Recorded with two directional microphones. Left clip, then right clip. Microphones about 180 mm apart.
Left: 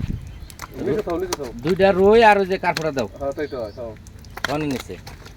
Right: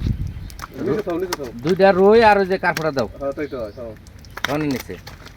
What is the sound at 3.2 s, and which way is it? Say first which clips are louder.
Speech: even; 40° right (ahead or behind).